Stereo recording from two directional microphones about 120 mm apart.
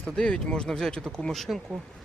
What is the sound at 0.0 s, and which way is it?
Speech, 10° left (ahead or behind).